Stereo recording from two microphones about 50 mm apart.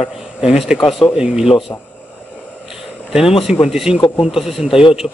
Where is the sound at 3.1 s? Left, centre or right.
Centre.